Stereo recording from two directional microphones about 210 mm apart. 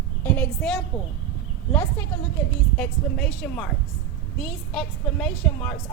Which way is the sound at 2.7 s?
5° left (ahead or behind).